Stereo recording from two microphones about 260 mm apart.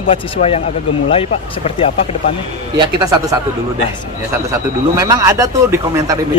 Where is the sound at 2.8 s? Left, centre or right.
Centre.